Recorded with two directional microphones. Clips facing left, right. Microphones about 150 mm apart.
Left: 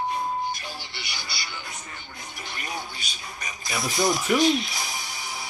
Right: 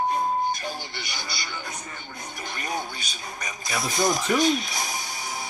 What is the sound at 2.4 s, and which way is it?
Speech, 45° right (ahead or behind).